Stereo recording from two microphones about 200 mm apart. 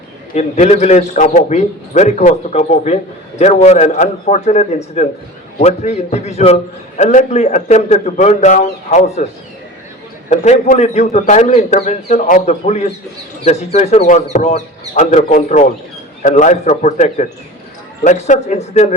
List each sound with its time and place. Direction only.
0.3 s a man's voice: 35° left (ahead or behind)